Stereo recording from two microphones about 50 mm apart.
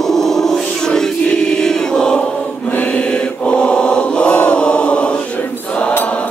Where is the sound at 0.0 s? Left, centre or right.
Centre.